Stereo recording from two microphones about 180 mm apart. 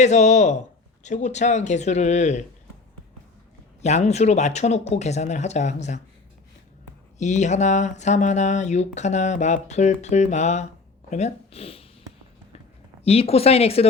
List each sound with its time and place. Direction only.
0.0 s speech: 40° left (ahead or behind)
3.8 s speech: 40° left (ahead or behind)
7.2 s speech: 40° left (ahead or behind)
13.1 s speech: 35° left (ahead or behind)